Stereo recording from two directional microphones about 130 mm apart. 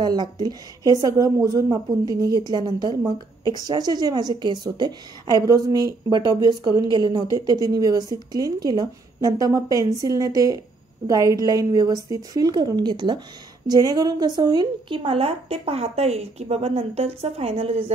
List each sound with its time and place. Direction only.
0.0 s a woman's voice: 35° right (ahead or behind)